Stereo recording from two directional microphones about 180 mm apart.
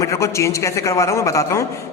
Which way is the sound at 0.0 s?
15° left (ahead or behind).